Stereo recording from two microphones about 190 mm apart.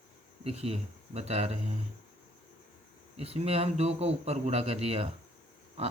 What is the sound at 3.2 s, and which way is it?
Speech, 30° right (ahead or behind).